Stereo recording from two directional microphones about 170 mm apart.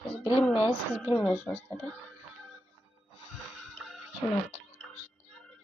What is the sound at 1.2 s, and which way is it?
Speech, 10° left (ahead or behind).